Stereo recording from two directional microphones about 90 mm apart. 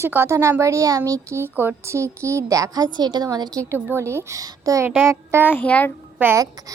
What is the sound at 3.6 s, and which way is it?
Speech, 30° right (ahead or behind).